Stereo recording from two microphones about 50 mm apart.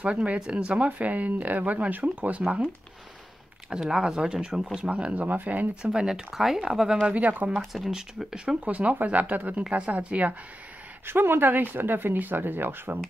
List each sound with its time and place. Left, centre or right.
0.0 s speech: right
3.7 s speech: centre
4.7 s speech: right
5.8 s speech: centre
7.0 s speech: right
7.5 s speech: centre
8.6 s speech: right
9.6 s speech: right
11.1 s speech: right